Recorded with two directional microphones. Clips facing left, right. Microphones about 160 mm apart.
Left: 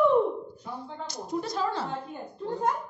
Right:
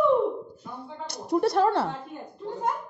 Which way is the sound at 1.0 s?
65° right (ahead or behind).